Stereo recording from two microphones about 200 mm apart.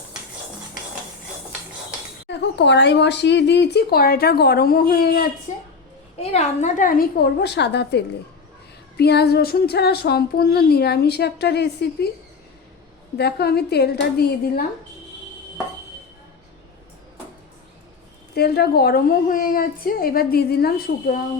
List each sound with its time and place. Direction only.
2.3 s speech: 60° left (ahead or behind)
5.5 s a sound: 35° left (ahead or behind)
6.1 s speech: 35° left (ahead or behind); by 11.9 s 55° left (ahead or behind)
13.1 s speech: 55° left (ahead or behind)
18.3 s speech: 55° left (ahead or behind)